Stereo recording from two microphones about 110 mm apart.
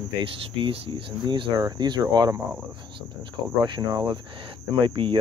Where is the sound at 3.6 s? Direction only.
45° right (ahead or behind).